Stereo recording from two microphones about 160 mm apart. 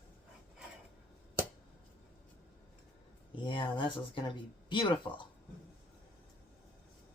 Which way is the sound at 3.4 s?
30° left (ahead or behind).